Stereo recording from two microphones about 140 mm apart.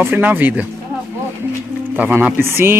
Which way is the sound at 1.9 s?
10° right (ahead or behind).